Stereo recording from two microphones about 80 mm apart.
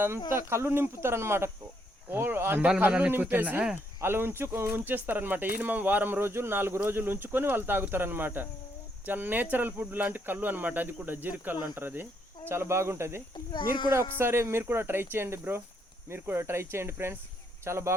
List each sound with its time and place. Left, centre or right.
0.3 s speech: right
13.3 s speech: left
14.2 s speech: right